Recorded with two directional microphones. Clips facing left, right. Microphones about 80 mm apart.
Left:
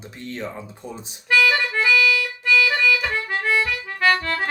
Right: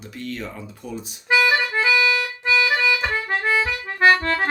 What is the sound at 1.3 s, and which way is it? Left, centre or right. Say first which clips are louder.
Accordion: right 1 dB; right.